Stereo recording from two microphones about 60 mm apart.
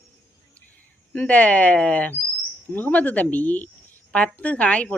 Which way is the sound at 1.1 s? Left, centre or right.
Left.